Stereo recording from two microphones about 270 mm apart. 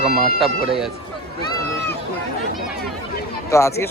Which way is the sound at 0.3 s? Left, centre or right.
Centre.